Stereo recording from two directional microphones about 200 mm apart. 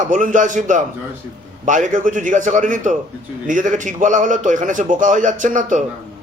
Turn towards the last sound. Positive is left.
turn(degrees=-40)  # may be behind; listen again after turning